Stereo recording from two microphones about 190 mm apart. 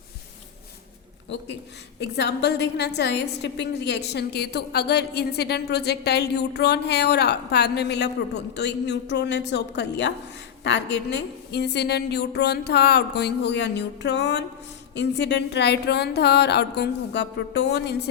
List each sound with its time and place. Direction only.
2.0 s a woman's voice: 60° left (ahead or behind)